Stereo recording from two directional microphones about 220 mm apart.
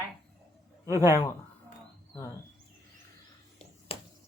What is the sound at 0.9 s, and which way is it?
Speech, 10° right (ahead or behind).